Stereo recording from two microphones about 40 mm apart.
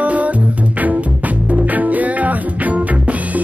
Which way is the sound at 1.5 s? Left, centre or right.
Right.